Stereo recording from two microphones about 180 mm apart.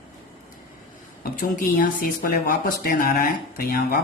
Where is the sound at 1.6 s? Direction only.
50° left (ahead or behind).